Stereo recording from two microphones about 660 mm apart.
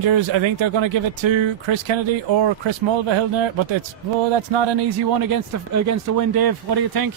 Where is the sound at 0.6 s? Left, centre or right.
Right.